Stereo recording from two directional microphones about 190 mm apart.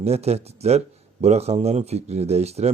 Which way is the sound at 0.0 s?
35° right (ahead or behind).